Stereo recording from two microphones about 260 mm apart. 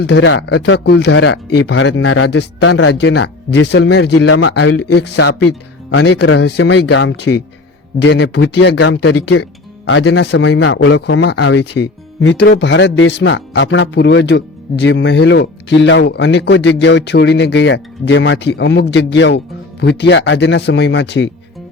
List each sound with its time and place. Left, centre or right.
0.0 s speech: left